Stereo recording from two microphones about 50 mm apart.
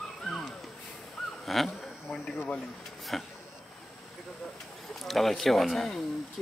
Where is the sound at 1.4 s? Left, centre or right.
Centre.